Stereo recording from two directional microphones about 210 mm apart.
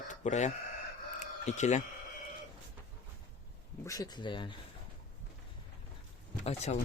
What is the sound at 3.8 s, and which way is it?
Speech, 15° left (ahead or behind).